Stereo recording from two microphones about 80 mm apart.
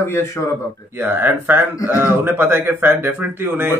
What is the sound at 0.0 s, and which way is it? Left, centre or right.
Speech, left.